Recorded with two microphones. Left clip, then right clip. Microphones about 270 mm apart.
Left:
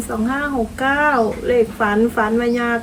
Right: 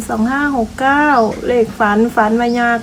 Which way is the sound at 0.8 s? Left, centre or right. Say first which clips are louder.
Right 4 dB; right.